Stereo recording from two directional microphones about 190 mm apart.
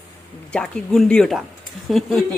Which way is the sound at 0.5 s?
5° left (ahead or behind).